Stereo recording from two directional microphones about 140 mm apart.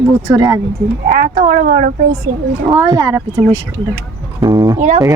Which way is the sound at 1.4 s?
80° right.